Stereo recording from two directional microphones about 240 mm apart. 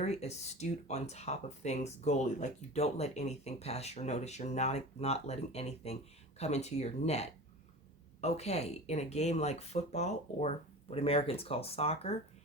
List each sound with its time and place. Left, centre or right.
0.0 s speech: left